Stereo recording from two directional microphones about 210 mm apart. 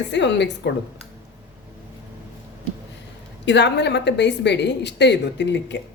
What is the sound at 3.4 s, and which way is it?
A woman's voice, 55° left (ahead or behind).